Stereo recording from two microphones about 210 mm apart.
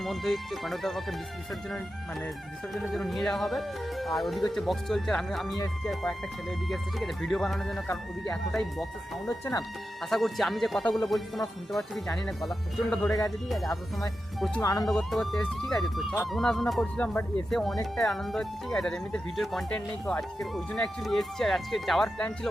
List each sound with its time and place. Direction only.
0.0 s speech: centre (ahead or behind)
2.7 s speech: centre (ahead or behind)
14.6 s speech: 20° left (ahead or behind)
14.8 s speech: centre (ahead or behind)